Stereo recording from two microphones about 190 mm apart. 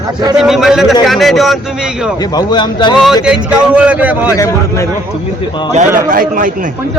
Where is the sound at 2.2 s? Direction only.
20° left (ahead or behind).